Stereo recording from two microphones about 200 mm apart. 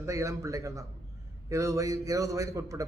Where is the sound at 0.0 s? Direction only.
15° right (ahead or behind).